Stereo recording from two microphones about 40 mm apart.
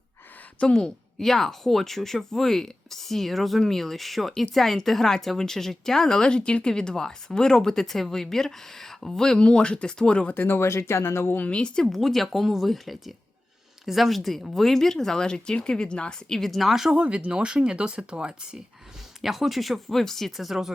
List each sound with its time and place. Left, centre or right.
0.7 s speech: centre
10.3 s speech: left
11.5 s speech: left
11.9 s speech: centre; by 16.1 s left
16.3 s speech: centre
16.9 s speech: right
19.2 s speech: centre